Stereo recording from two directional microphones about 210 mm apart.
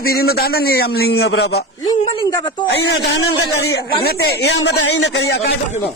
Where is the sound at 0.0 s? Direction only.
45° left (ahead or behind).